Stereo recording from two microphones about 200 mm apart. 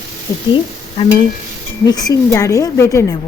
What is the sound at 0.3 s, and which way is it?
Speech, 15° left (ahead or behind).